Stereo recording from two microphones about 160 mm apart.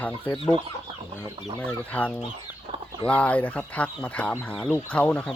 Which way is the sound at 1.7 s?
10° left (ahead or behind).